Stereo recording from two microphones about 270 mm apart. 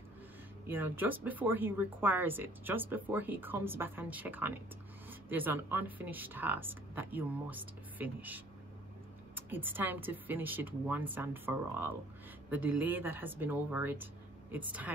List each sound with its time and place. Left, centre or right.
0.7 s a woman's voice: centre